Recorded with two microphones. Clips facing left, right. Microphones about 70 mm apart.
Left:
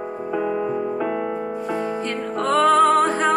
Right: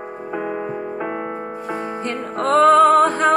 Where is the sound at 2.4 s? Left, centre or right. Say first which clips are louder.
Right 4 dB; right.